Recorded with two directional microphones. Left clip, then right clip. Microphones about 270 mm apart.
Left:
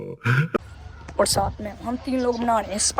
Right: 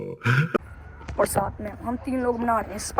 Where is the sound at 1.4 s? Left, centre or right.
Centre.